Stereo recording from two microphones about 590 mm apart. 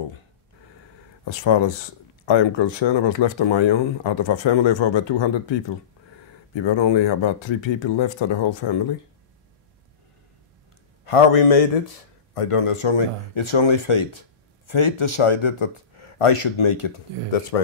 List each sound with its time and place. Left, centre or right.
1.2 s speech: left
6.5 s speech: left
11.1 s speech: left
12.4 s speech: left